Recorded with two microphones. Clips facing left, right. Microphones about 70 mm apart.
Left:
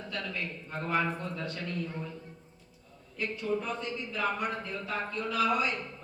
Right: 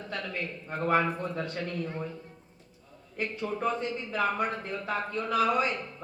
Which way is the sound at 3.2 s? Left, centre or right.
Right.